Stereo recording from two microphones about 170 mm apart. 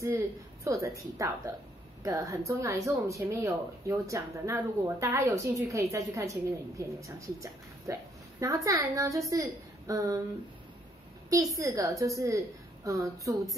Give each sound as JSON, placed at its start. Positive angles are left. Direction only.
{"t": 0.7, "sound": "speech", "side_deg": -20}
{"t": 11.5, "sound": "speech", "side_deg": -20}